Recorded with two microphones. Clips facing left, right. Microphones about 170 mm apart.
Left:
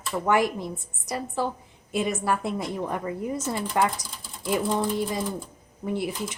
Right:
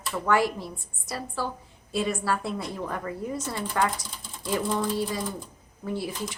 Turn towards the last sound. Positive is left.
turn(degrees=20)  # may be behind; listen again after turning